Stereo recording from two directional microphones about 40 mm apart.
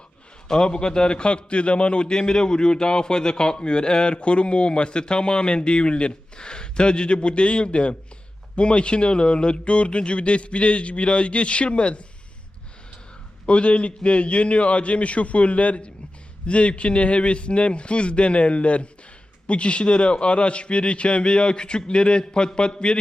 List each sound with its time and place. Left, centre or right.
0.4 s a man's voice: centre
13.5 s a man's voice: left